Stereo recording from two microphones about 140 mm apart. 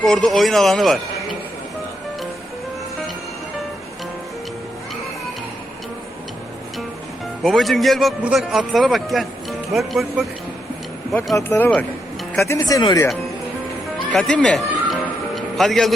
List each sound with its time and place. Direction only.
0.0 s a man's voice: 5° left (ahead or behind)
7.4 s a man's voice: centre (ahead or behind)
11.3 s speech: 15° left (ahead or behind)
12.4 s speech: 20° left (ahead or behind)
14.1 s music: 5° left (ahead or behind)